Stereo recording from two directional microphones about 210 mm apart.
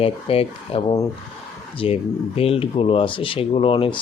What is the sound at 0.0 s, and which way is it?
Speech, 25° left (ahead or behind).